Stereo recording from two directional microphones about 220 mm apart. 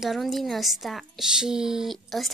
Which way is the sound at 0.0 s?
Centre (ahead or behind).